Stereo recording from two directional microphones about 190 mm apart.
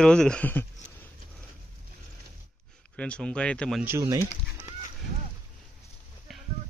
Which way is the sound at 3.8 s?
15° right (ahead or behind).